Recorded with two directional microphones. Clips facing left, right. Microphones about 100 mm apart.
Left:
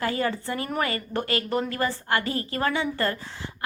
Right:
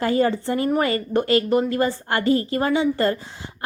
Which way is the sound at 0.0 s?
30° right (ahead or behind).